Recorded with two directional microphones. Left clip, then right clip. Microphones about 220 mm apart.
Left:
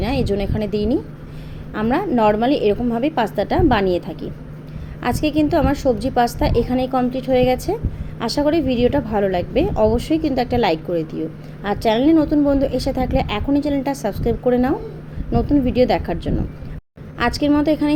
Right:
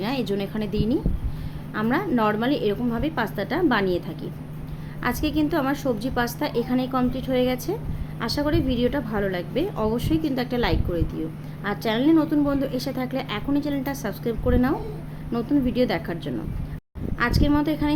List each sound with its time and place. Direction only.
0.0 s a woman's voice: 10° left (ahead or behind)